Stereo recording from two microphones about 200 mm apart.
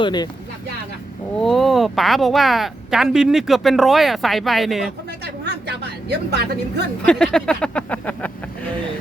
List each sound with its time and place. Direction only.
0.0 s speech: 20° left (ahead or behind)
1.4 s speech: centre (ahead or behind)
5.2 s a sound: 55° right (ahead or behind)
7.0 s speech: 5° left (ahead or behind)